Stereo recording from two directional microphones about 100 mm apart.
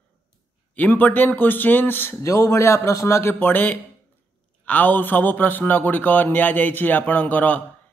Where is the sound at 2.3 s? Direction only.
30° left (ahead or behind).